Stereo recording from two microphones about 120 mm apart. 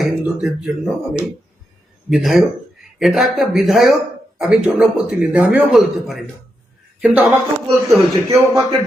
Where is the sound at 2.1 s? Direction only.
Centre (ahead or behind).